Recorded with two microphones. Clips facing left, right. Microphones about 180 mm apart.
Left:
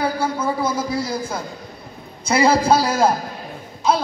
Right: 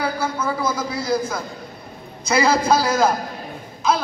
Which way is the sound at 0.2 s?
30° left (ahead or behind).